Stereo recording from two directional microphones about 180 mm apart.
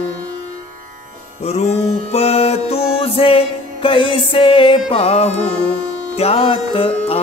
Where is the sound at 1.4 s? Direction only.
35° left (ahead or behind).